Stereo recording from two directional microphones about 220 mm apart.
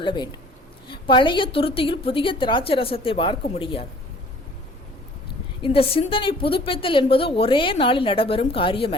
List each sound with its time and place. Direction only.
0.0 s a woman's voice: 20° left (ahead or behind)
5.6 s a woman's voice: 25° left (ahead or behind)